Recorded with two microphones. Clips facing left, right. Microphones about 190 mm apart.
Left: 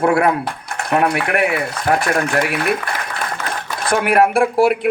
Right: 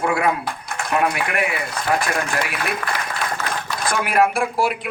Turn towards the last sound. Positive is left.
turn(degrees=60)  # may be behind; listen again after turning